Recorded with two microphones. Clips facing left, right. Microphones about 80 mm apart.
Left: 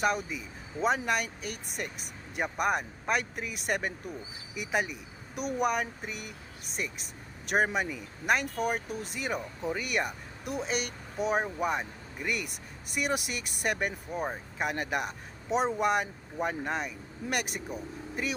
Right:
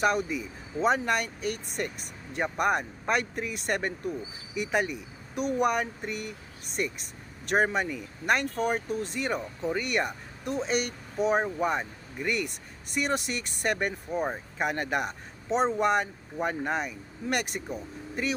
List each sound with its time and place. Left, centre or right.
0.0 s speech: centre